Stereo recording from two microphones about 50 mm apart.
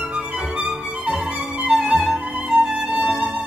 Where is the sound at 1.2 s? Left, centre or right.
Right.